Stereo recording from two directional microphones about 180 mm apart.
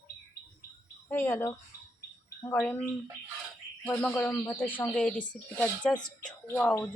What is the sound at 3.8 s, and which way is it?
Speech, 10° left (ahead or behind).